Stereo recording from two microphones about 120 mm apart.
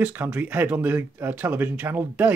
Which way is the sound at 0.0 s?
15° right (ahead or behind).